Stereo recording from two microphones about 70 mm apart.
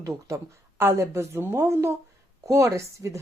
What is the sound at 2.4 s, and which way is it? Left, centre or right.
Speech, right.